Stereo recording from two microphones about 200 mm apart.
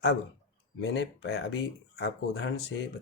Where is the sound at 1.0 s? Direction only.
55° left (ahead or behind).